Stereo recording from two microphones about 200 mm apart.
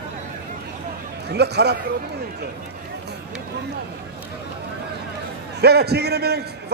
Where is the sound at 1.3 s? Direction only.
55° right (ahead or behind).